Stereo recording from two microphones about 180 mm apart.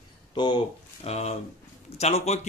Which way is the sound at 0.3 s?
25° left (ahead or behind).